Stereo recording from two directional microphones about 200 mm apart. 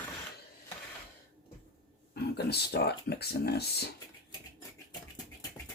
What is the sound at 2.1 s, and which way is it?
Speech, 55° left (ahead or behind).